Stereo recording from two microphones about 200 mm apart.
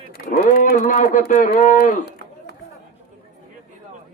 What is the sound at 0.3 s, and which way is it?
Speech, 45° left (ahead or behind).